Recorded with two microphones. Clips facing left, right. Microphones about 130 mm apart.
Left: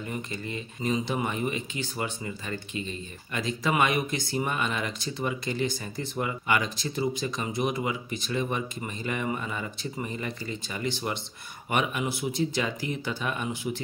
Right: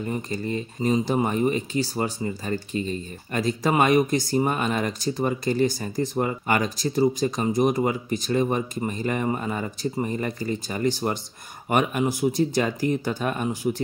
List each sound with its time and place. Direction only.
0.0 s speech: 35° right (ahead or behind)